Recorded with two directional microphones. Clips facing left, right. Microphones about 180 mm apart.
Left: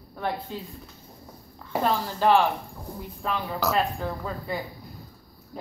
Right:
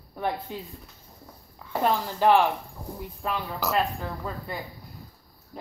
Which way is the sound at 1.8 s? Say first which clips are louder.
Right 1 dB; 15° right (ahead or behind).